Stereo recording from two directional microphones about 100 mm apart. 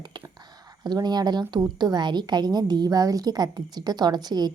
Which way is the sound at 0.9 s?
45° right (ahead or behind).